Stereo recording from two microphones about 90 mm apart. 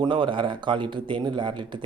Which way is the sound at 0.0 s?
65° right (ahead or behind).